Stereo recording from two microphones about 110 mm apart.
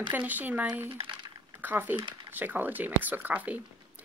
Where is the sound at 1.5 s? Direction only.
15° right (ahead or behind).